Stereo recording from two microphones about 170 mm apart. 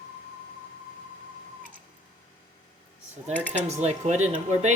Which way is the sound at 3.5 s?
40° right (ahead or behind).